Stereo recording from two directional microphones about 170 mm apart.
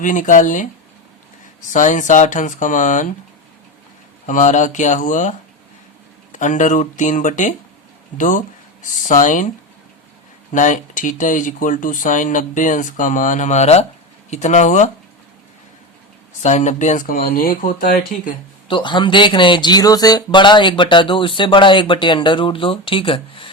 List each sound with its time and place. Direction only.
0.0 s speech: 50° left (ahead or behind)
1.7 s speech: 45° left (ahead or behind)
4.3 s speech: 50° left (ahead or behind)
6.3 s speech: 45° left (ahead or behind)
10.5 s speech: 50° left (ahead or behind)
16.4 s speech: 45° left (ahead or behind)
18.7 s speech: 30° left (ahead or behind)